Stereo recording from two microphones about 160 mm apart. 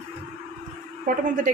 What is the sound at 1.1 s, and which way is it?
Speech, 55° right (ahead or behind).